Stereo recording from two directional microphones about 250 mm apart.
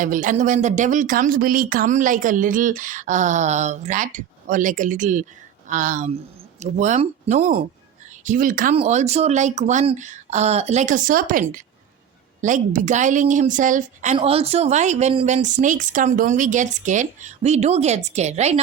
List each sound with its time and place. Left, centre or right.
0.0 s a woman's voice: right